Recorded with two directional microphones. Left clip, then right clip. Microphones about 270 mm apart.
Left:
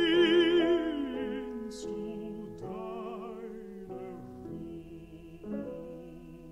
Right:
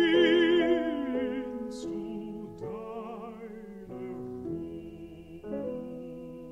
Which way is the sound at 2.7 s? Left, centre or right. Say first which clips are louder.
Left 1 dB; left.